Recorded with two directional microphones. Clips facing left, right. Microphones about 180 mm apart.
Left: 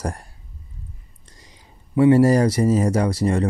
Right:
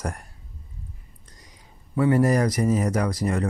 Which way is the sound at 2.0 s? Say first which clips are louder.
Left 6 dB; 25° left (ahead or behind).